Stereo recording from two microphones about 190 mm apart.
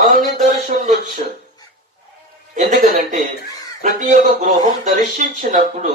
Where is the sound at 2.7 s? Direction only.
40° right (ahead or behind).